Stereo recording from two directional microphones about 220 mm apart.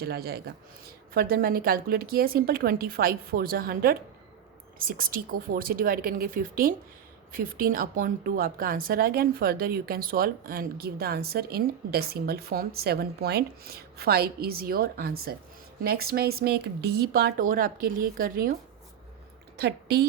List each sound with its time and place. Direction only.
0.0 s a woman's voice: 45° right (ahead or behind)
19.5 s a woman's voice: 45° right (ahead or behind)